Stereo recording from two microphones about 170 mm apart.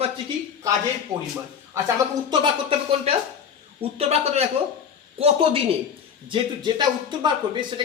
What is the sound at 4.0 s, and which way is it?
A man's voice, 40° right (ahead or behind).